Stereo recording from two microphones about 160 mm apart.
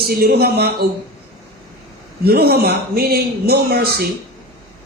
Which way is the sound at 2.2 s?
75° right (ahead or behind).